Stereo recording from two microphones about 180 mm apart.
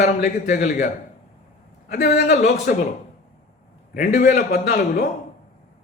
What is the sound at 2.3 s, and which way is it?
Speech, 40° left (ahead or behind).